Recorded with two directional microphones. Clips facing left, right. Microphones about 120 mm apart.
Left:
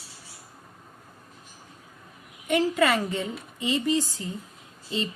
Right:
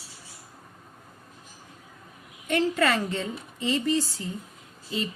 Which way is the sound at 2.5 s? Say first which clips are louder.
Left 1 dB; 10° left (ahead or behind).